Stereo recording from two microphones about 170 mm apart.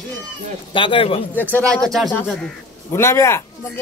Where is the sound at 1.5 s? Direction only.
5° left (ahead or behind).